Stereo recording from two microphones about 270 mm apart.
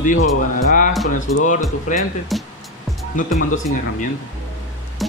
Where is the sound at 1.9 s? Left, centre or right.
Left.